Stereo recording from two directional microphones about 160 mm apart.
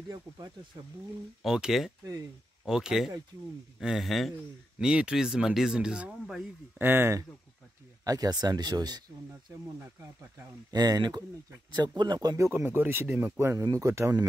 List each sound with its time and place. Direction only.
1.4 s speech: centre (ahead or behind)
6.8 s speech: 15° right (ahead or behind)
10.7 s speech: 25° right (ahead or behind)